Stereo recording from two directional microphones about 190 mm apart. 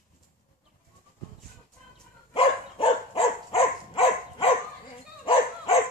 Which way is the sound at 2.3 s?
30° left (ahead or behind).